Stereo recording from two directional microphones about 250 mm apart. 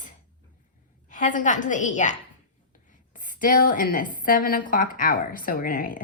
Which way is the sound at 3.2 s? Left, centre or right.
Left.